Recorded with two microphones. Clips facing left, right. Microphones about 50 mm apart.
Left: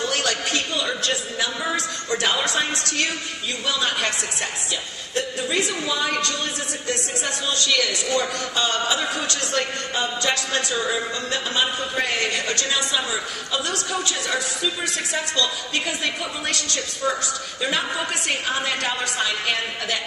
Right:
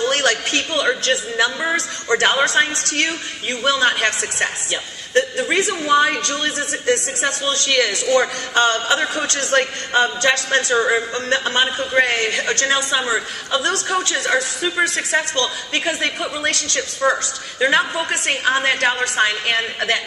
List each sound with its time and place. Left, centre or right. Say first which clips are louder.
0.0 s a woman's voice: right 6 dB; right